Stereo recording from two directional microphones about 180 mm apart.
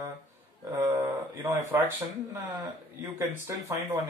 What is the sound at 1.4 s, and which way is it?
A man's voice, 20° right (ahead or behind).